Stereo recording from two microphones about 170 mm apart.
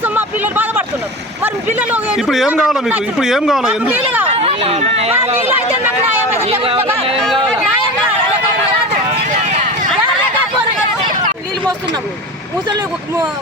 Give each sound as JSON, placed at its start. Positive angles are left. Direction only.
{"t": 0.0, "sound": "a sound", "side_deg": -10}
{"t": 1.6, "sound": "a man's voice", "side_deg": -10}
{"t": 4.3, "sound": "speech", "side_deg": -35}
{"t": 6.4, "sound": "speech", "side_deg": -35}